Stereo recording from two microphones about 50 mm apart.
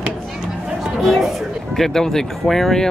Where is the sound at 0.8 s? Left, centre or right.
Centre.